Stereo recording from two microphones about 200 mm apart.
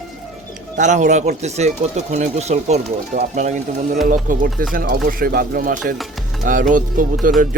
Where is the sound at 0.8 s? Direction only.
35° right (ahead or behind).